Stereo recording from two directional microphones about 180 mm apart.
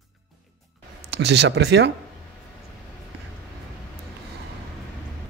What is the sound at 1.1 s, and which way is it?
Speech, 70° right (ahead or behind).